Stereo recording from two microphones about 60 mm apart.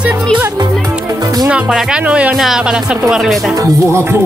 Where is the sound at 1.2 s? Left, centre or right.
Right.